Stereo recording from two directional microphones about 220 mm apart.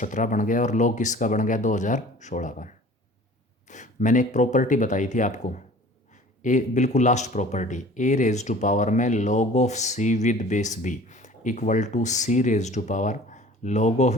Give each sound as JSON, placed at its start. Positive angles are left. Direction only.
{"t": 0.0, "sound": "speech", "side_deg": 35}
{"t": 6.4, "sound": "speech", "side_deg": 35}